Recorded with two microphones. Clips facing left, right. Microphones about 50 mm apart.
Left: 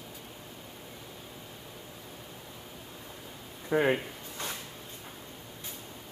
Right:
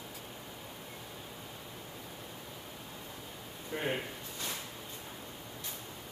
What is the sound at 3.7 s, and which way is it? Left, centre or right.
Speech, left.